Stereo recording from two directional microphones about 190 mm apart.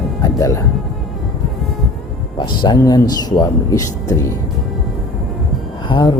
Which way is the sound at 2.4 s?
25° left (ahead or behind).